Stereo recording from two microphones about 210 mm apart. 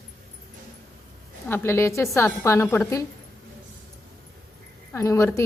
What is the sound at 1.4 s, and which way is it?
A woman's voice, 10° left (ahead or behind).